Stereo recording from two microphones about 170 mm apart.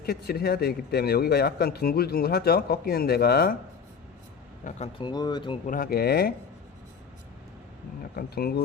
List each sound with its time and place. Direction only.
0.0 s a man's voice: 65° left (ahead or behind)
4.9 s speech: 25° left (ahead or behind)
5.6 s speech: 55° left (ahead or behind)
8.1 s speech: 65° left (ahead or behind)